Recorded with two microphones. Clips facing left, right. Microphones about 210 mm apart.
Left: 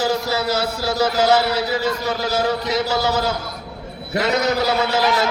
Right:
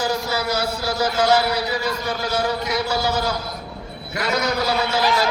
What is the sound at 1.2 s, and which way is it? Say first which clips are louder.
A man's voice: even; 25° left (ahead or behind).